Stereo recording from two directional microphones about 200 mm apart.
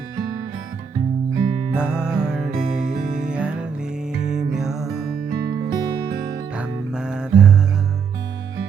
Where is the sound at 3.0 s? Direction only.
40° right (ahead or behind).